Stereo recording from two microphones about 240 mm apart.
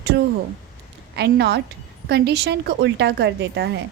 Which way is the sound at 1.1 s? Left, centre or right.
Right.